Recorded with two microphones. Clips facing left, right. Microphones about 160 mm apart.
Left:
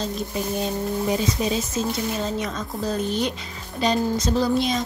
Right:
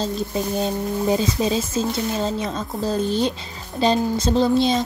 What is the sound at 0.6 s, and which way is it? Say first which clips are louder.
A woman's voice: right 1 dB; 30° right (ahead or behind).